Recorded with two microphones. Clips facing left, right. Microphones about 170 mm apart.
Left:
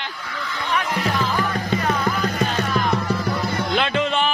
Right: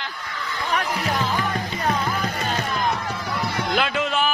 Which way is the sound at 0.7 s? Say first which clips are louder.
Left 2 dB; 40° right (ahead or behind).